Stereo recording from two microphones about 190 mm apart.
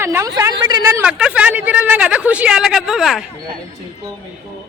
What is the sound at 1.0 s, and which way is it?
A woman's voice, 5° right (ahead or behind).